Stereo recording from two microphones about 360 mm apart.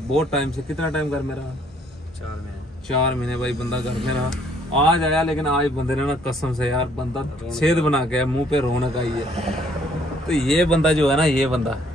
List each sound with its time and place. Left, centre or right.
0.1 s speech: centre
3.1 s speech: centre
9.1 s a man's voice: centre
10.2 s speech: centre